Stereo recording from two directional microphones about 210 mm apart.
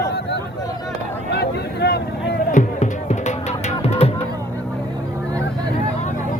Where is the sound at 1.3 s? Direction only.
50° left (ahead or behind); by 4.1 s 30° left (ahead or behind).